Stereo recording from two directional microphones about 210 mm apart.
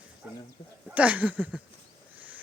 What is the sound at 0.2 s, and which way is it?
Speech, 5° right (ahead or behind).